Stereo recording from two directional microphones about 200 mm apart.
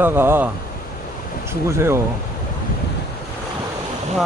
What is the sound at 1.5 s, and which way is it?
Speech, 15° right (ahead or behind).